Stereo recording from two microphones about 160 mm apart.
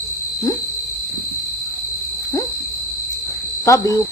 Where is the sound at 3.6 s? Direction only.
20° left (ahead or behind).